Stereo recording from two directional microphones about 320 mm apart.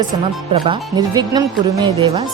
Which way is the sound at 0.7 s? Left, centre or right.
Centre.